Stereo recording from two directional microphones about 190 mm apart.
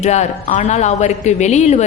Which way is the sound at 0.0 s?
35° left (ahead or behind).